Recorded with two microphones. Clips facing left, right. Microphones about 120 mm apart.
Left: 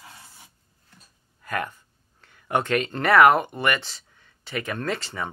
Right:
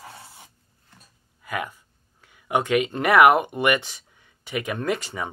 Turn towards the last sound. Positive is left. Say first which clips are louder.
# right 2 dB
turn(degrees=-15)  # may be behind; listen again after turning